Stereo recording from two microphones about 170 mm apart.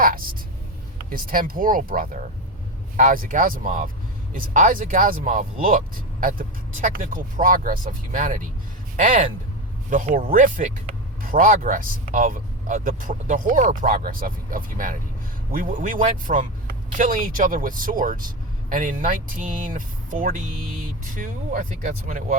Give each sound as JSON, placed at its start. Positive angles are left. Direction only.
{"t": 0.0, "sound": "a woman's voice", "side_deg": -55}